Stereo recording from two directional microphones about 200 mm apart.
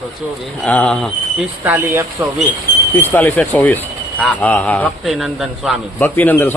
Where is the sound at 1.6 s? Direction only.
10° right (ahead or behind).